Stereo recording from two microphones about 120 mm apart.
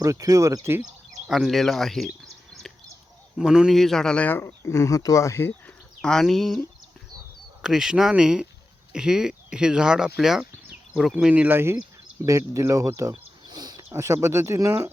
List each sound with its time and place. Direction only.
0.0 s speech: 30° right (ahead or behind)
1.3 s speech: centre (ahead or behind)
2.5 s a sound: 5° left (ahead or behind)
3.3 s speech: 5° right (ahead or behind); by 13.8 s 35° right (ahead or behind)
13.9 s speech: 25° right (ahead or behind)